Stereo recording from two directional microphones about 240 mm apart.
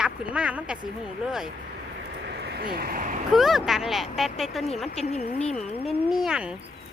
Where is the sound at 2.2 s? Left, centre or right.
Right.